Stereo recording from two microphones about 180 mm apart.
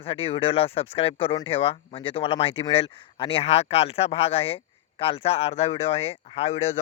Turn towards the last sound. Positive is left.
turn(degrees=35)  # may be behind; listen again after turning